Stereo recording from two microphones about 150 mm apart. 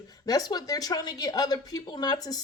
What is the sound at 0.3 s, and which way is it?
Speech, 25° left (ahead or behind).